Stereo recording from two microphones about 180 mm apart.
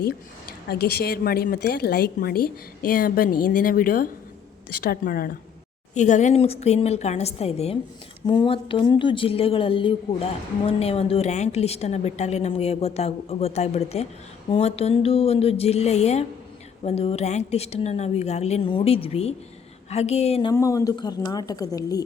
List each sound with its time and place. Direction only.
0.7 s a woman's voice: 60° left (ahead or behind)
5.9 s a woman's voice: 40° left (ahead or behind)
20.5 s a woman's voice: 20° left (ahead or behind)